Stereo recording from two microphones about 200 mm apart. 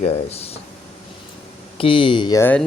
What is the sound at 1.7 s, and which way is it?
Speech, 25° left (ahead or behind).